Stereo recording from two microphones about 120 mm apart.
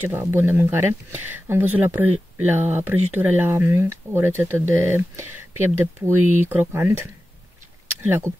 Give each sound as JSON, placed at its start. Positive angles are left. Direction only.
{"t": 0.0, "sound": "speech", "side_deg": -20}